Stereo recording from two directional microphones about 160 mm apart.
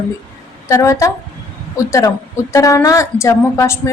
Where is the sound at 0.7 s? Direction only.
20° left (ahead or behind).